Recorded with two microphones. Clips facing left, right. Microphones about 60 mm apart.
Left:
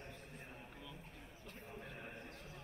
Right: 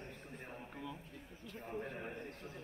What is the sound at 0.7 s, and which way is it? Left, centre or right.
A man's voice, right.